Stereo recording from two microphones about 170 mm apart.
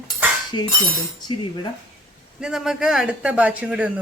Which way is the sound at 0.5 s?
25° left (ahead or behind).